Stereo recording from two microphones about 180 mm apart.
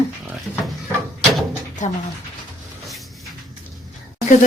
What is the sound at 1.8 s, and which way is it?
Speech, 45° left (ahead or behind).